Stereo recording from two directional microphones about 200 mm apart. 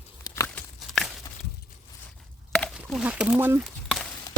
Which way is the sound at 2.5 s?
Centre (ahead or behind).